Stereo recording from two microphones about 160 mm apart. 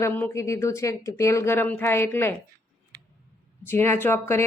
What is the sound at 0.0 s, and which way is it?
A woman's voice, 20° left (ahead or behind).